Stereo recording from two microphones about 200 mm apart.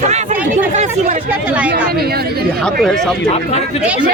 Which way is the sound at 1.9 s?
50° right (ahead or behind).